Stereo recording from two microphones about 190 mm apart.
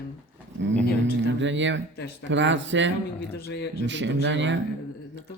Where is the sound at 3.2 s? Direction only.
60° left (ahead or behind).